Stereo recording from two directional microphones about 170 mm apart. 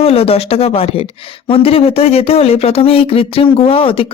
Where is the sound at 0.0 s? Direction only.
35° left (ahead or behind).